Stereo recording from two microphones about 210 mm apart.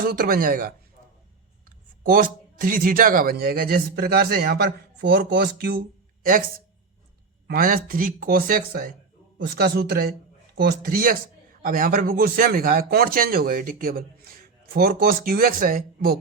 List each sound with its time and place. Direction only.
0.0 s a man's voice: 45° right (ahead or behind)
2.0 s a man's voice: 40° right (ahead or behind)
7.4 s a man's voice: 45° right (ahead or behind)